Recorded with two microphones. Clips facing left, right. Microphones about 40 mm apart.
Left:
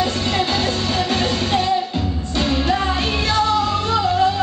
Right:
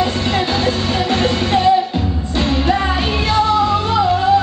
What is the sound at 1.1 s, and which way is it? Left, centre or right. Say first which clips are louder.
Music: right 5 dB; centre.